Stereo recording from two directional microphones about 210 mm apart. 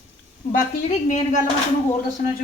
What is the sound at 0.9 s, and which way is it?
Speech, 30° left (ahead or behind).